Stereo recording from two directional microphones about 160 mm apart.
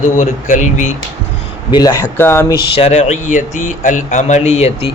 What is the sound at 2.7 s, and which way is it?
Speech, 40° left (ahead or behind).